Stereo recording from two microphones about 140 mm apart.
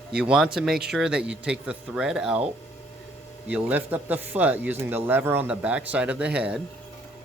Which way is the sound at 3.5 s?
10° right (ahead or behind).